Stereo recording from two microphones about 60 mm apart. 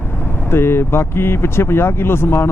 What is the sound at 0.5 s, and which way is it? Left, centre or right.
Speech, left.